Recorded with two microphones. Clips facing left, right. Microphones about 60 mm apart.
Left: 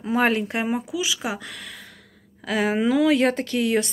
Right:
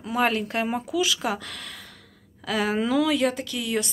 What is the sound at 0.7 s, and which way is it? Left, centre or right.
Speech, centre.